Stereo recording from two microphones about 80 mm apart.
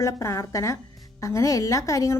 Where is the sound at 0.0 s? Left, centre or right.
Left.